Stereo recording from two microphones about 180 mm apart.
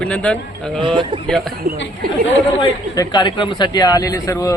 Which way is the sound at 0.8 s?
30° right (ahead or behind).